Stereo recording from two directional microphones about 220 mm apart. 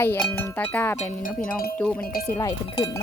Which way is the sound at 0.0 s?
5° left (ahead or behind).